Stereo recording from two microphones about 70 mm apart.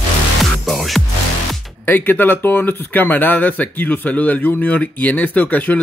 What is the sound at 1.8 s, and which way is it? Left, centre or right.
Speech, left.